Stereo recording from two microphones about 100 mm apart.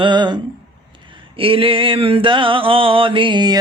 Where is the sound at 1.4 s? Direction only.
65° right (ahead or behind).